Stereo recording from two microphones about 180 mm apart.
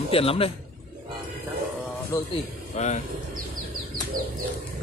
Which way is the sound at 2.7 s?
40° left (ahead or behind).